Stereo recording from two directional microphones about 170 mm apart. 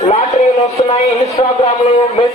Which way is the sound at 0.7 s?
40° left (ahead or behind).